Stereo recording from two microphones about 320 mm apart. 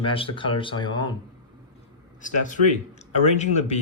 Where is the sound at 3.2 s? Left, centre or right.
Left.